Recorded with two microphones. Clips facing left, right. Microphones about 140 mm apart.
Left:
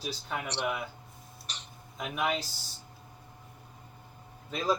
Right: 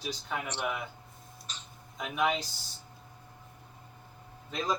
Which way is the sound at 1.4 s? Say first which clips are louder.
Left 1 dB; 70° left (ahead or behind).